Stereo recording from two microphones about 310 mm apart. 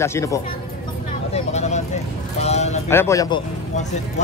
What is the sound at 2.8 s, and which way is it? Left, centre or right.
Speech, centre.